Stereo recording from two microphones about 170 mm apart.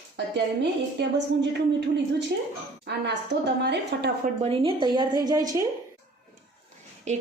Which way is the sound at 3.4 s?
80° right.